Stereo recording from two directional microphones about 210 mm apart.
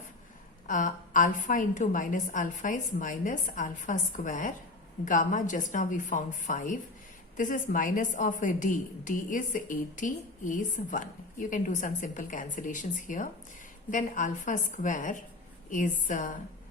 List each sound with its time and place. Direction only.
0.7 s a woman's voice: 40° left (ahead or behind)